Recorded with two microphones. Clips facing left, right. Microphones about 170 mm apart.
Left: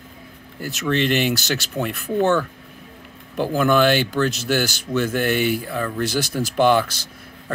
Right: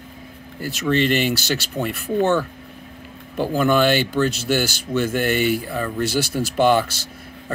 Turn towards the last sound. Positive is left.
turn(degrees=-5)  # may be behind; listen again after turning